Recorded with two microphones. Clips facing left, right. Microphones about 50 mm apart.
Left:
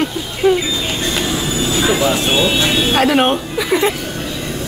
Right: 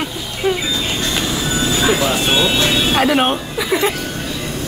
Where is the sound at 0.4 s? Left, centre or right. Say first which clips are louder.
Left 5 dB; centre.